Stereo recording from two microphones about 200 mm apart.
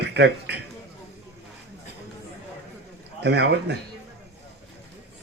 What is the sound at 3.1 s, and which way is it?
Speech, 55° right (ahead or behind).